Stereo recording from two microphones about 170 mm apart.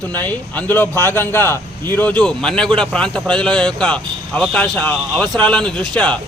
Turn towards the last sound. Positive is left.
turn(degrees=5)  # may be behind; listen again after turning